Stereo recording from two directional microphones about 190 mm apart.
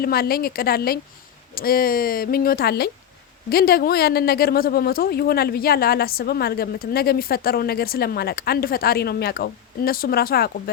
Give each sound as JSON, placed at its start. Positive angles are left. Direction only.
{"t": 0.0, "sound": "speech", "side_deg": 55}